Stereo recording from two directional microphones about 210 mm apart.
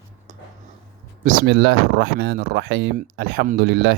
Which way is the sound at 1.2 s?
45° right (ahead or behind).